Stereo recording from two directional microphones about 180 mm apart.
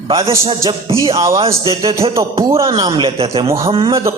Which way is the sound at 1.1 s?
20° right (ahead or behind).